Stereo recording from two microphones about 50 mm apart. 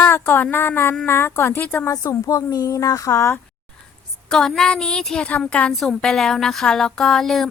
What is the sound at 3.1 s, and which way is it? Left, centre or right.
Speech, left.